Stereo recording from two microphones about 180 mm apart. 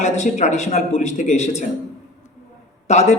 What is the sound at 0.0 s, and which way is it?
A man's voice, 40° left (ahead or behind).